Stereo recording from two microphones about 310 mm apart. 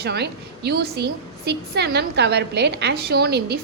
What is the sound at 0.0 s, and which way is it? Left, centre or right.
A woman's voice, right.